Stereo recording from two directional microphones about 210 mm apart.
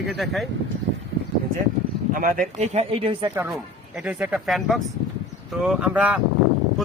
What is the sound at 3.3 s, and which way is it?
A man's voice, 5° right (ahead or behind).